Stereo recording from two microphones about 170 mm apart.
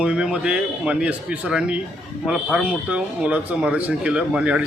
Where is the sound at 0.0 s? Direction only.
5° right (ahead or behind).